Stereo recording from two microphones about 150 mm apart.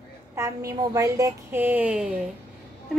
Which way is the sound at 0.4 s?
20° right (ahead or behind).